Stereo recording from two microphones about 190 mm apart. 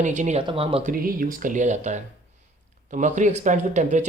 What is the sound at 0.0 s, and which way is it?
Speech, 40° right (ahead or behind).